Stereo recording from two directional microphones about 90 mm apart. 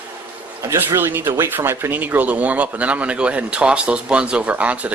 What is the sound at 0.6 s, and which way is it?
Speech, 25° right (ahead or behind).